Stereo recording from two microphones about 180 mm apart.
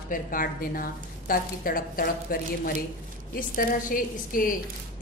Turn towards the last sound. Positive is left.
turn(degrees=50)  # may be behind; listen again after turning